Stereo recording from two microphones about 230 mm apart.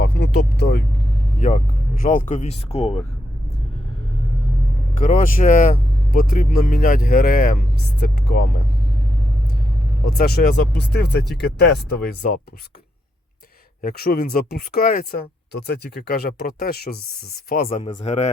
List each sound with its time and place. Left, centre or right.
0.0 s speech: left
4.9 s speech: left
10.1 s speech: left
13.8 s speech: left
17.8 s speech: left